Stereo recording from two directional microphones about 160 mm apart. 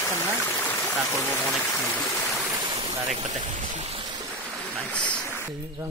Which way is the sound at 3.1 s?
45° right (ahead or behind).